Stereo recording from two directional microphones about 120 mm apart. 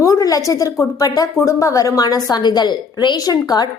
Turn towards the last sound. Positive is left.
turn(degrees=35)  # may be behind; listen again after turning